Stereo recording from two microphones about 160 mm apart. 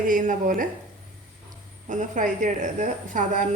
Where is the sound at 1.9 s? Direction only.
50° right (ahead or behind).